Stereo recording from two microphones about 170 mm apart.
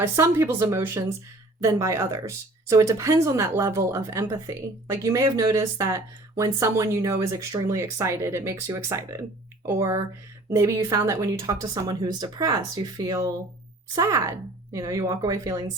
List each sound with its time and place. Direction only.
0.0 s speech: 15° right (ahead or behind)